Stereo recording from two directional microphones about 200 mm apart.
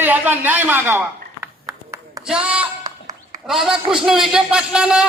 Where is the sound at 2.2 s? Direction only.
5° right (ahead or behind).